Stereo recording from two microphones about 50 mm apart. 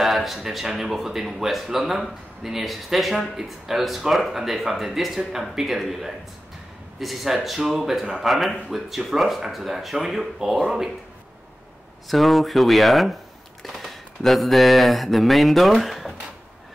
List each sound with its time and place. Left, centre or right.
0.0 s speech: centre
12.1 s speech: centre